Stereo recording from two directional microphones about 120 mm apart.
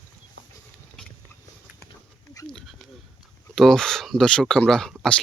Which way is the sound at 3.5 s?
5° left (ahead or behind).